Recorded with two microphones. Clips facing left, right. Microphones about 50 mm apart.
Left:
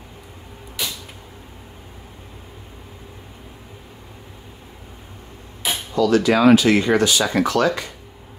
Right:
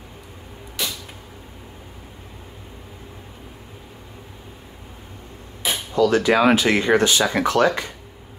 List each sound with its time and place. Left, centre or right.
5.7 s speech: right